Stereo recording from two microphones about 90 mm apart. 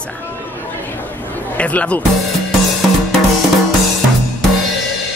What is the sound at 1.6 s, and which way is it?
Speech, 15° left (ahead or behind).